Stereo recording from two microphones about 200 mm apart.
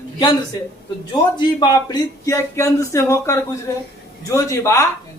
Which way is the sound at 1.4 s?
20° left (ahead or behind).